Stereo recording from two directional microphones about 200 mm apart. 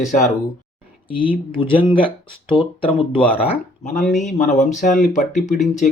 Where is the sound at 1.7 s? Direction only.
25° left (ahead or behind).